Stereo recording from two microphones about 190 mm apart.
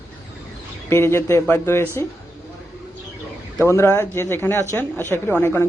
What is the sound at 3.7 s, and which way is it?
Speech, 15° left (ahead or behind).